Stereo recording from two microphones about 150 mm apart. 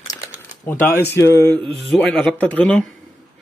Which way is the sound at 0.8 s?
15° left (ahead or behind).